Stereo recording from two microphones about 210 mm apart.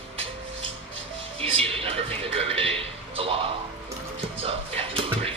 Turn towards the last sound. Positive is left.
turn(degrees=-25)  # may be behind; listen again after turning